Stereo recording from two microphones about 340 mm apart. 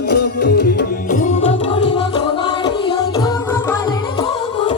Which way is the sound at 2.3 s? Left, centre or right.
Centre.